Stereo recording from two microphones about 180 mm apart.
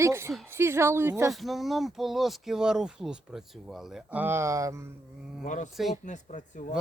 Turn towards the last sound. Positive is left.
turn(degrees=45)  # may be behind; listen again after turning